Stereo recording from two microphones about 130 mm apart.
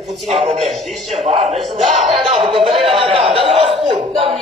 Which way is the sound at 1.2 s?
60° right (ahead or behind).